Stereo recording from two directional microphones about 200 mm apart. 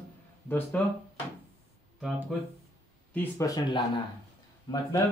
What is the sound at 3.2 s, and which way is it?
Speech, 15° left (ahead or behind).